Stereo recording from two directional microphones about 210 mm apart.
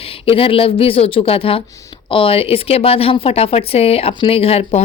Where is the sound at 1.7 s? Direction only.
15° left (ahead or behind).